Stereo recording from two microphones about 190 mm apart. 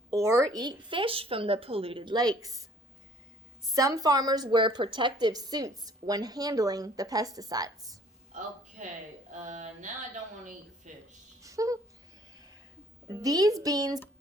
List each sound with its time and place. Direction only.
0.1 s a woman's voice: 15° right (ahead or behind)
3.7 s a woman's voice: 20° right (ahead or behind)
8.3 s a woman's voice: 40° right (ahead or behind)
10.8 s a sound: 40° right (ahead or behind)
11.4 s a sound: 15° right (ahead or behind)
13.1 s a woman's voice: 20° right (ahead or behind)